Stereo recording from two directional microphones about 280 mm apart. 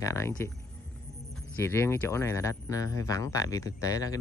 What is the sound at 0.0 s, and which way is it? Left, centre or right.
Speech, centre.